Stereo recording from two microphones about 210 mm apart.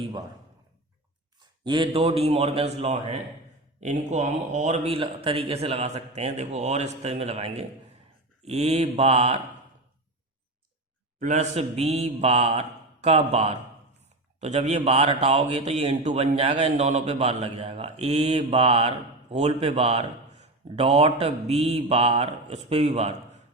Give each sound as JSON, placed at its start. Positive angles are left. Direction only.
{"t": 1.6, "sound": "a man's voice", "side_deg": -20}
{"t": 11.2, "sound": "a man's voice", "side_deg": -35}